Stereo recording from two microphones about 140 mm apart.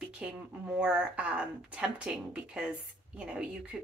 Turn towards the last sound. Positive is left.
turn(degrees=-10)  # may be behind; listen again after turning